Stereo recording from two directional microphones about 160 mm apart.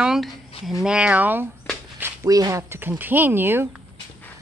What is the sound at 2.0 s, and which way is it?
Speech, 20° right (ahead or behind).